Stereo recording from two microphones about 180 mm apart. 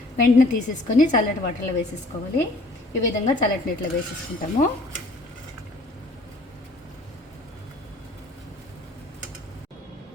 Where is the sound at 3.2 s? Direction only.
45° left (ahead or behind).